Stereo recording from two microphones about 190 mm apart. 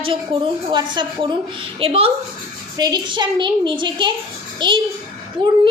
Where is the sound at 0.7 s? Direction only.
25° right (ahead or behind).